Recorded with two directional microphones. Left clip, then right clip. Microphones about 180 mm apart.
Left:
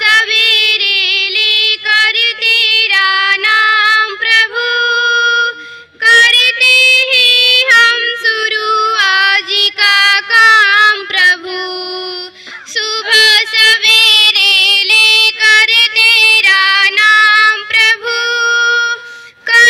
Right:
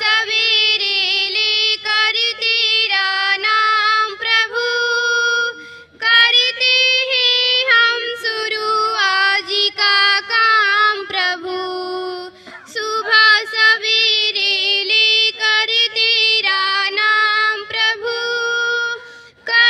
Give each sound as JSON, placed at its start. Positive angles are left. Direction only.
{"t": 0.0, "sound": "female singing", "side_deg": -70}
{"t": 6.0, "sound": "child singing", "side_deg": -70}
{"t": 12.7, "sound": "child singing", "side_deg": -55}
{"t": 19.5, "sound": "music", "side_deg": -10}